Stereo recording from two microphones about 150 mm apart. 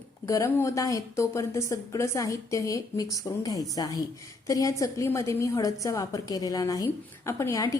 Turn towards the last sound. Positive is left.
turn(degrees=20)  # may be behind; listen again after turning